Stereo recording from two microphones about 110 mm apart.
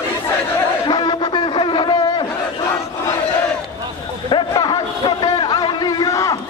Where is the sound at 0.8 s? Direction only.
40° left (ahead or behind).